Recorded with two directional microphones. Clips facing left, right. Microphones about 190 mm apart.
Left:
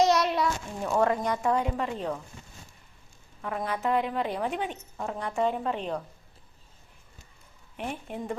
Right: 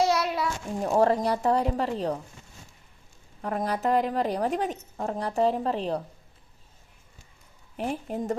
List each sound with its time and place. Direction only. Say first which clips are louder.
0.0 s a sound: left 2 dB; 5° right (ahead or behind)
0.8 s a woman's voice: right 4 dB; 35° right (ahead or behind)
3.4 s a woman's voice: right 3 dB; 40° right (ahead or behind)
7.8 s a woman's voice: right 5 dB; 35° right (ahead or behind)